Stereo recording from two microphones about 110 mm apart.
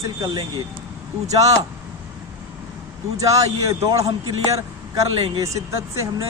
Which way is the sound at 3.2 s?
30° right (ahead or behind).